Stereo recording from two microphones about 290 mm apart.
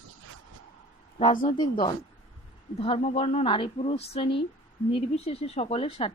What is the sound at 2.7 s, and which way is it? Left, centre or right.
Speech, centre.